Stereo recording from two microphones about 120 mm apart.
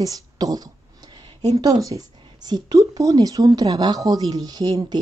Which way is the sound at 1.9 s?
40° right (ahead or behind).